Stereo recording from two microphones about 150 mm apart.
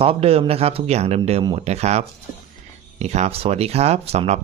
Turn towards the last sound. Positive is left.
turn(degrees=-45)  # may be behind; listen again after turning